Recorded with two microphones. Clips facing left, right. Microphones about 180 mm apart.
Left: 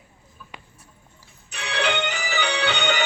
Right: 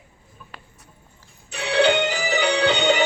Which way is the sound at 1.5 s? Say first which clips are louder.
Right 7 dB; 30° right (ahead or behind).